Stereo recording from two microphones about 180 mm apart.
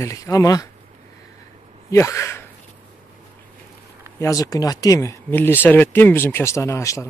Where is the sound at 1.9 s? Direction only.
15° left (ahead or behind).